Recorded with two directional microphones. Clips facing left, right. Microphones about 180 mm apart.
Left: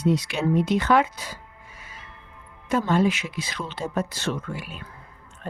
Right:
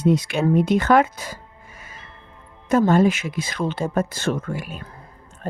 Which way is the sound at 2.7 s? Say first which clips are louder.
Right 5 dB; 45° right (ahead or behind).